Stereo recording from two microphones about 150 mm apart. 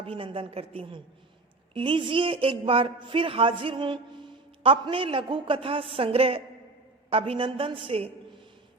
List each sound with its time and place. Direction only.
0.0 s speech: 35° right (ahead or behind)